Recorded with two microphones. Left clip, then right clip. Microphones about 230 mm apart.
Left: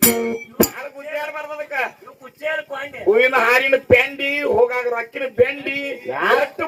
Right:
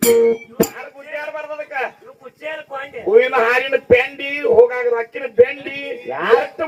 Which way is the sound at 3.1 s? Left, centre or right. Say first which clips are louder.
Right 1 dB; left.